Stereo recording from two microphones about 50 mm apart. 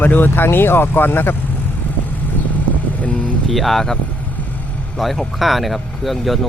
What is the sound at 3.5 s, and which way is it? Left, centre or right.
Speech, centre.